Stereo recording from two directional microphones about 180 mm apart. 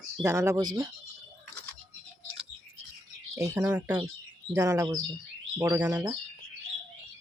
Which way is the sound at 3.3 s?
15° right (ahead or behind).